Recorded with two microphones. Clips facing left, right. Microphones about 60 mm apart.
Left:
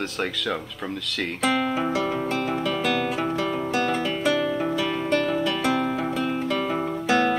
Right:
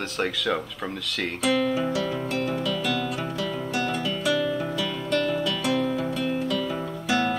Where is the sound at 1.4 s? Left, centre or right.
Left.